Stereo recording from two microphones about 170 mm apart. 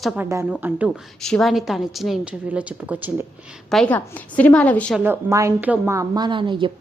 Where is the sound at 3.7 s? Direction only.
5° left (ahead or behind).